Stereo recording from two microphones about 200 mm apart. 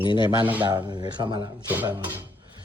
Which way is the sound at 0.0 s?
25° left (ahead or behind).